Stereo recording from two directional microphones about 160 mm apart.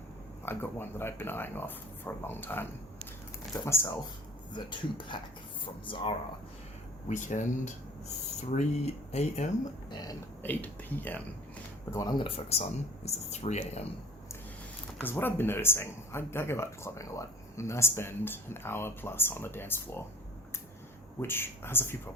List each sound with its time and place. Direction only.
0.4 s speech: 15° left (ahead or behind)
4.5 s speech: 30° left (ahead or behind)
7.1 s speech: 50° left (ahead or behind)
10.4 s speech: 10° left (ahead or behind)
11.9 s speech: 25° left (ahead or behind); by 13.8 s 45° left (ahead or behind)
15.0 s speech: 15° left (ahead or behind)
21.2 s speech: 15° left (ahead or behind)